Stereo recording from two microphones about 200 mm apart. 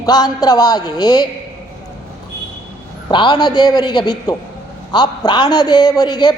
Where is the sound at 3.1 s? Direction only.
25° left (ahead or behind).